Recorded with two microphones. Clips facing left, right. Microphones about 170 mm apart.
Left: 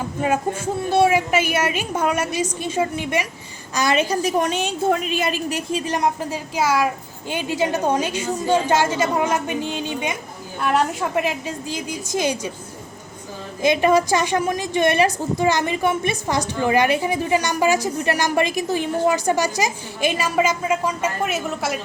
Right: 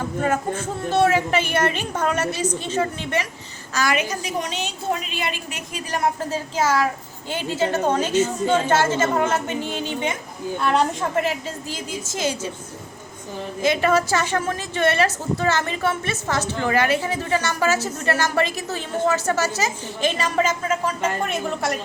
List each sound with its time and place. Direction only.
0.2 s a woman's voice: 10° left (ahead or behind)
3.8 s a woman's voice: 25° left (ahead or behind)
4.2 s a woman's voice: 45° left (ahead or behind); by 6.1 s 25° left (ahead or behind)
6.3 s a woman's voice: 10° left (ahead or behind)
13.6 s a woman's voice: 15° left (ahead or behind)